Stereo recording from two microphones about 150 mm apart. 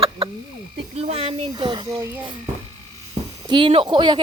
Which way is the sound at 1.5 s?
30° right (ahead or behind).